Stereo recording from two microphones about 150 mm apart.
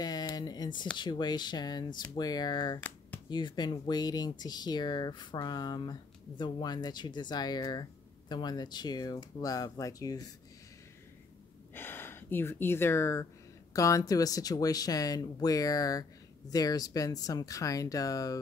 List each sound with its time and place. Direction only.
0.0 s a sound: 25° left (ahead or behind)
0.9 s speech: 30° left (ahead or behind)
11.7 s speech: 15° left (ahead or behind)